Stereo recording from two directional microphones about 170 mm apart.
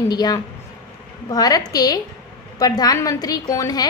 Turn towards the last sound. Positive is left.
turn(degrees=20)  # may be behind; listen again after turning